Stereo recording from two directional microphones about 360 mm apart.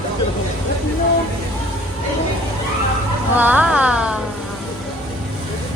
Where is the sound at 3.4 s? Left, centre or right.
Centre.